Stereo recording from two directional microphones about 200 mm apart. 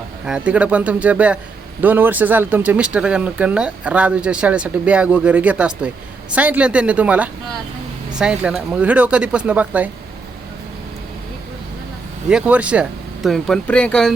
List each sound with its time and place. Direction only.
0.3 s speech: 5° right (ahead or behind)
12.3 s speech: 5° right (ahead or behind)